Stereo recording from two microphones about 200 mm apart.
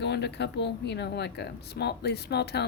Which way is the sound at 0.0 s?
60° left (ahead or behind).